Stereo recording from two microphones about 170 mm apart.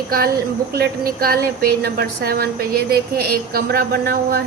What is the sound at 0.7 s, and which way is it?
A woman's voice, 65° right (ahead or behind).